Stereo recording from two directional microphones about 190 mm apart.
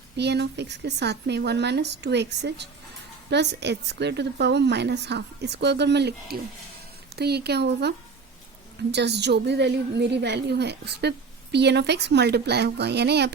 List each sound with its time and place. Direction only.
0.2 s a woman's voice: 60° right (ahead or behind)